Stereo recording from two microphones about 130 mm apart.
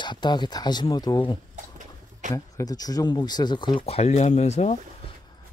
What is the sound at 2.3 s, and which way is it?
Speech, 25° left (ahead or behind).